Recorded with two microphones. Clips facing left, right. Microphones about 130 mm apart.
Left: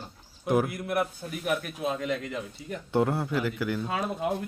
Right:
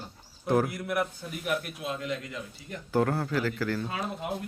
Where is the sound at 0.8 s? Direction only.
30° left (ahead or behind).